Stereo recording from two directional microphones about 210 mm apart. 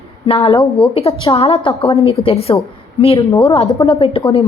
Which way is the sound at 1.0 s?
25° left (ahead or behind).